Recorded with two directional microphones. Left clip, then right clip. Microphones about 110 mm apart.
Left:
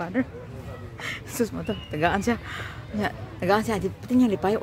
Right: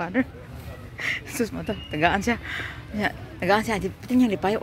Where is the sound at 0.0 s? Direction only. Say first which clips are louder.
Right 2 dB; 15° right (ahead or behind).